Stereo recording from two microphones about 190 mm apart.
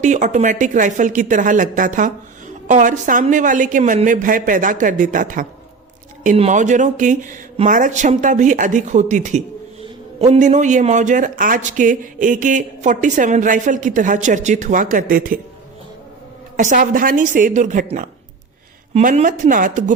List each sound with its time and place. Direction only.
0.0 s speech: 40° right (ahead or behind)
16.6 s speech: 40° right (ahead or behind)